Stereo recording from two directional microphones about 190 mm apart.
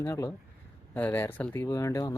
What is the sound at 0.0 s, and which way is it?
Speech, 15° left (ahead or behind).